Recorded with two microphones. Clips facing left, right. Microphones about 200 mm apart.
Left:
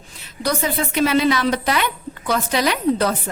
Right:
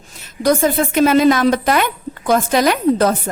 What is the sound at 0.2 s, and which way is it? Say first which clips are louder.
A woman's voice: right 8 dB; 45° right (ahead or behind).